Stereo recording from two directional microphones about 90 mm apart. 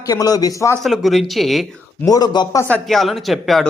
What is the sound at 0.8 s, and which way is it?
Speech, centre (ahead or behind).